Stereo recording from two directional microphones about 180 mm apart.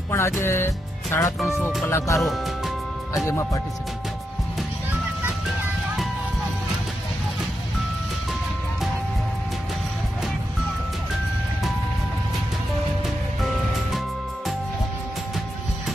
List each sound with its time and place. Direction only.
0.1 s music: 15° left (ahead or behind)
1.4 s speech: centre (ahead or behind)
1.9 s speech: 15° left (ahead or behind)
2.2 s speech: centre (ahead or behind)